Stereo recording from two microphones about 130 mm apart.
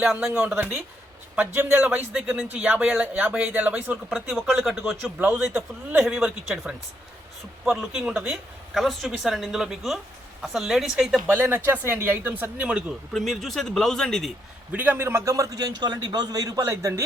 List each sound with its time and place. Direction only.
0.0 s speech: 5° right (ahead or behind)
1.7 s a woman's voice: 15° right (ahead or behind)
11.3 s speech: 15° right (ahead or behind)
13.1 s a woman's voice: centre (ahead or behind)
14.7 s a man's voice: 15° right (ahead or behind)